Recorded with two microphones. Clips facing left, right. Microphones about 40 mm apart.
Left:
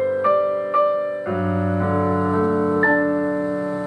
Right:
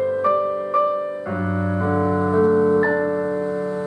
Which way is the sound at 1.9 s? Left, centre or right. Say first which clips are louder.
Right 2 dB; centre.